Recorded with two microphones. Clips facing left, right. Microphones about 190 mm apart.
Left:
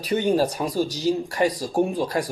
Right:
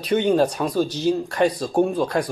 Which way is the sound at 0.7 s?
60° right (ahead or behind).